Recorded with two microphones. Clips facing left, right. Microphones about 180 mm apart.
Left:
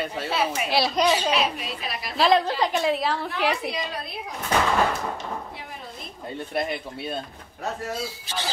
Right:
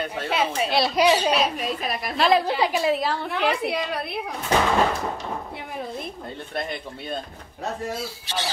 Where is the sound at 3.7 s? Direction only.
60° right (ahead or behind).